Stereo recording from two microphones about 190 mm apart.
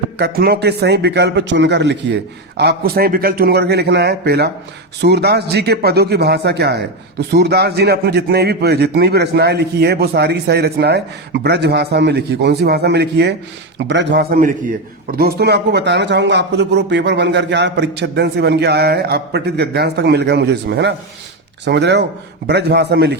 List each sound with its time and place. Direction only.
0.2 s speech: 55° right (ahead or behind)
2.6 s speech: 55° right (ahead or behind)